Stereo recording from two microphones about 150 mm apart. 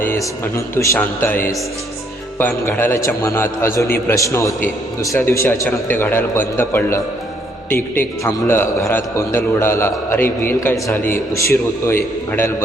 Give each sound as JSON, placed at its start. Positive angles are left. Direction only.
{"t": 0.0, "sound": "a man's voice", "side_deg": 15}